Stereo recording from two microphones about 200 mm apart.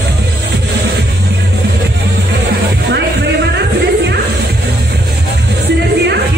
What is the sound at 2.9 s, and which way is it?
Music, 60° right (ahead or behind).